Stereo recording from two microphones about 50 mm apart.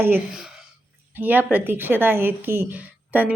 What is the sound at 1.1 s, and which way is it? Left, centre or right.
Speech, right.